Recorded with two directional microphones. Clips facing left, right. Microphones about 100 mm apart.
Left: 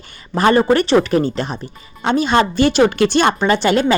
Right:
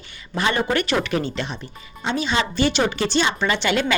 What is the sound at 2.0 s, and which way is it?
Speech, 55° left (ahead or behind).